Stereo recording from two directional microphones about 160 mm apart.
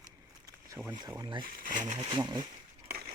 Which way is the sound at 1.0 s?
25° right (ahead or behind).